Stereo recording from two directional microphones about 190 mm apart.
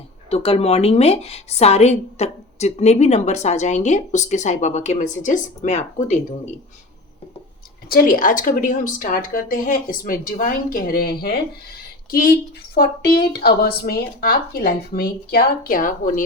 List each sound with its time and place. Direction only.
0.3 s a woman's voice: 30° left (ahead or behind)
7.9 s a woman's voice: 50° left (ahead or behind)
12.7 s a woman's voice: 55° left (ahead or behind)